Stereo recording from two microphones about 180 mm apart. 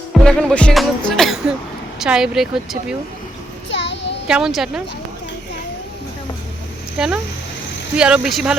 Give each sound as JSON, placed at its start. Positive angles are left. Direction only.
{"t": 0.1, "sound": "speech", "side_deg": 5}
{"t": 3.7, "sound": "child singing", "side_deg": 80}
{"t": 4.3, "sound": "speech", "side_deg": -5}
{"t": 7.9, "sound": "speech", "side_deg": -5}